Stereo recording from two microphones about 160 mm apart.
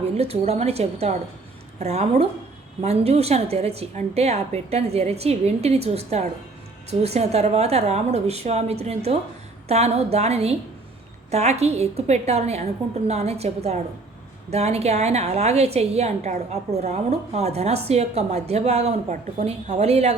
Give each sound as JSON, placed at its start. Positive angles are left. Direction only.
{"t": 0.0, "sound": "a woman's voice", "side_deg": -40}